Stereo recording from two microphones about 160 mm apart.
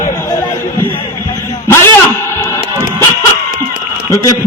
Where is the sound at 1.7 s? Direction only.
15° left (ahead or behind).